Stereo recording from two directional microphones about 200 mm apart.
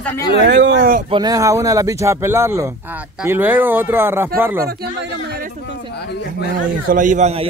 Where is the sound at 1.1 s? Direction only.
20° right (ahead or behind).